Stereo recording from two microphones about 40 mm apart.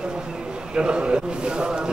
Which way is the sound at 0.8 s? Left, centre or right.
Right.